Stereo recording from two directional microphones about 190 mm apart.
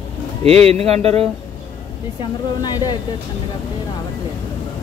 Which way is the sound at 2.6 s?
20° left (ahead or behind).